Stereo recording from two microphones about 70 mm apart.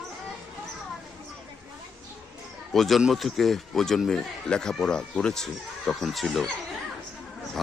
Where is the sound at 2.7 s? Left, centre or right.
Centre.